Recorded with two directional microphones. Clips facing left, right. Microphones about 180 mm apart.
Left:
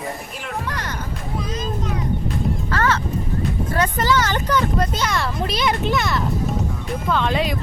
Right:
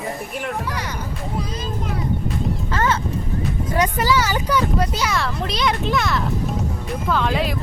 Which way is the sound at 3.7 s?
15° right (ahead or behind).